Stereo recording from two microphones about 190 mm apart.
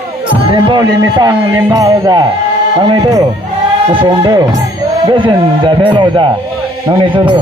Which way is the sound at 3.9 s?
25° right (ahead or behind).